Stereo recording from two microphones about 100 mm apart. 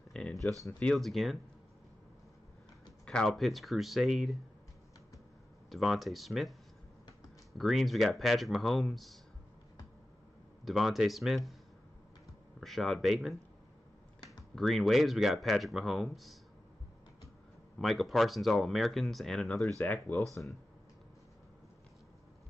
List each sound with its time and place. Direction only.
0.1 s a sound: 5° left (ahead or behind)
0.9 s speech: centre (ahead or behind)
3.1 s speech: 5° left (ahead or behind)
5.7 s speech: centre (ahead or behind)
7.5 s speech: centre (ahead or behind)
10.6 s speech: centre (ahead or behind)
12.5 s speech: centre (ahead or behind)
14.5 s speech: 5° left (ahead or behind)
17.7 s speech: centre (ahead or behind)
19.8 s speech: 15° left (ahead or behind)